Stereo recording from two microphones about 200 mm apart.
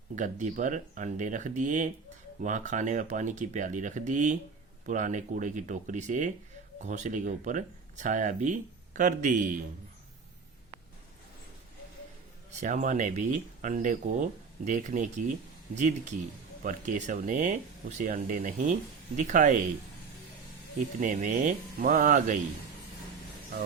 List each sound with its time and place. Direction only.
0.2 s speech: 40° right (ahead or behind)
12.5 s speech: 40° right (ahead or behind)
21.0 s speech: 40° right (ahead or behind)